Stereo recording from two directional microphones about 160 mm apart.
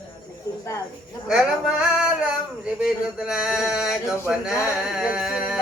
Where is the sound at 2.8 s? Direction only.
5° right (ahead or behind).